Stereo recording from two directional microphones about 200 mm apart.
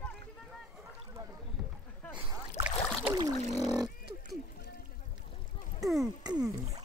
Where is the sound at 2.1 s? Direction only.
25° right (ahead or behind).